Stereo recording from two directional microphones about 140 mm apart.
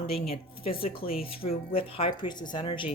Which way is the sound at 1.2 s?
40° left (ahead or behind).